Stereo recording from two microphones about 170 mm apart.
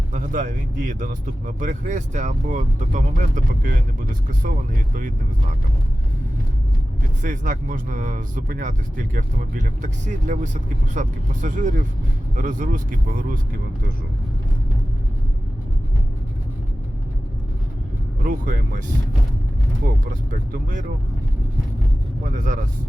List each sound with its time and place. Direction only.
0.1 s speech: 50° right (ahead or behind)
7.2 s speech: 50° right (ahead or behind)
18.2 s speech: 55° right (ahead or behind)
20.5 s speech: 50° right (ahead or behind)
22.2 s speech: 50° right (ahead or behind)